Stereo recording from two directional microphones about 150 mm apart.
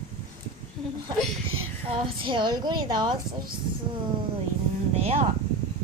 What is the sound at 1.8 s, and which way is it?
A woman's voice, 35° right (ahead or behind).